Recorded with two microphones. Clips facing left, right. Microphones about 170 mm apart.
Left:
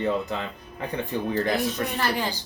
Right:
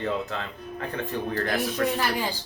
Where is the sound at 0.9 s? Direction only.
15° left (ahead or behind).